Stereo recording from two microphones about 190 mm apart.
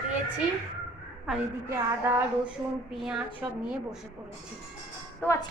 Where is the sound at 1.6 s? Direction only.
15° right (ahead or behind).